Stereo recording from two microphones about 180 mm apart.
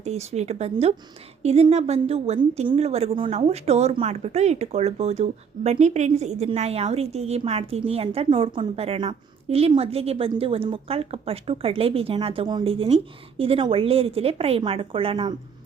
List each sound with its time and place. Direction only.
0.0 s a woman's voice: 35° right (ahead or behind)